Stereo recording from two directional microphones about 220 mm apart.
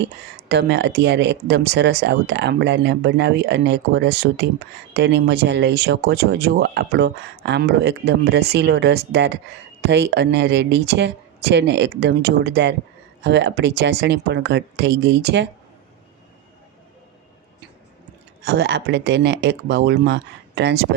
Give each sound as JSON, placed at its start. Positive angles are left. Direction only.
{"t": 0.4, "sound": "speech", "side_deg": -50}
{"t": 18.4, "sound": "speech", "side_deg": -50}